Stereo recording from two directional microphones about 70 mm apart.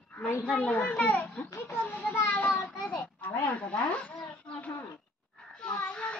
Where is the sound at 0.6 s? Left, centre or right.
Left.